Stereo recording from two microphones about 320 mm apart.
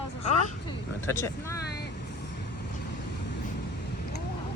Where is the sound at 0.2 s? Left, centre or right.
Centre.